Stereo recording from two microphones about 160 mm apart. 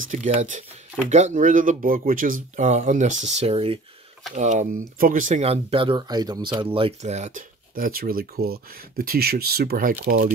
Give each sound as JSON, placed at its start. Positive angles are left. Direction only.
{"t": 0.3, "sound": "speech", "side_deg": -45}
{"t": 4.4, "sound": "speech", "side_deg": -50}
{"t": 5.4, "sound": "speech", "side_deg": -35}